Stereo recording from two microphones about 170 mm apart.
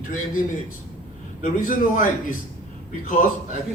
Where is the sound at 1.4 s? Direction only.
50° left (ahead or behind).